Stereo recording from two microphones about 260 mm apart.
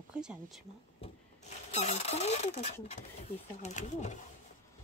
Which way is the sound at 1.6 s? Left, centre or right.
Left.